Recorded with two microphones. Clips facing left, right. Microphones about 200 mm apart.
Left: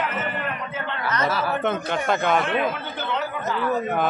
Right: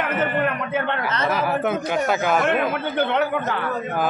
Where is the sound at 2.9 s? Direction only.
60° right (ahead or behind).